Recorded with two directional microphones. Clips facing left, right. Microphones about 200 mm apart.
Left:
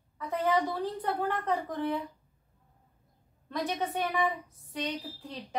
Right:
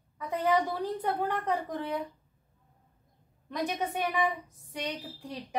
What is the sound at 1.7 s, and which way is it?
Speech, 15° right (ahead or behind).